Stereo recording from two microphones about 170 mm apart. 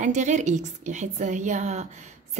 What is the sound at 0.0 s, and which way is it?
A woman's voice, 45° right (ahead or behind).